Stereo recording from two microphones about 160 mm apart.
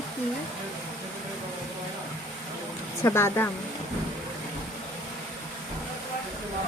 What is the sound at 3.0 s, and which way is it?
Speech, 15° left (ahead or behind).